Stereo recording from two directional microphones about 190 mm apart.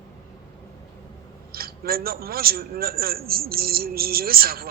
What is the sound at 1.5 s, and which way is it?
A man's voice, 50° right (ahead or behind).